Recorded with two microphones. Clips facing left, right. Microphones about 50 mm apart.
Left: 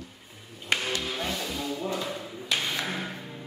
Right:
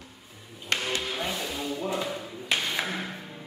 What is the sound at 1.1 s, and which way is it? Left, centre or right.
Music, centre.